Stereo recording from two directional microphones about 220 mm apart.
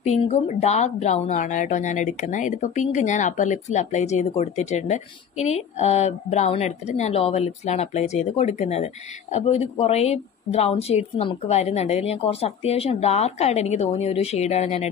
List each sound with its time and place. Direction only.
0.0 s speech: 30° left (ahead or behind)